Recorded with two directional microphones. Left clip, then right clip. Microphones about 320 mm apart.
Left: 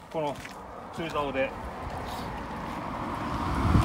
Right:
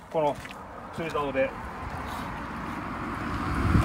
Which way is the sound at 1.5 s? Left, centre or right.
Left.